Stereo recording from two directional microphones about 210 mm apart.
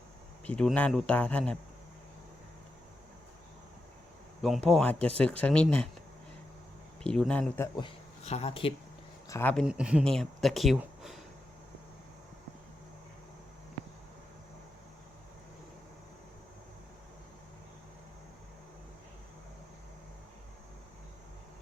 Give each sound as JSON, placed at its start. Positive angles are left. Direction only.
{"t": 0.4, "sound": "a man's voice", "side_deg": 5}
{"t": 4.4, "sound": "speech", "side_deg": 0}
{"t": 7.0, "sound": "speech", "side_deg": 5}
{"t": 7.8, "sound": "speech", "side_deg": 25}
{"t": 9.3, "sound": "a man's voice", "side_deg": 10}
{"t": 9.6, "sound": "speech", "side_deg": -5}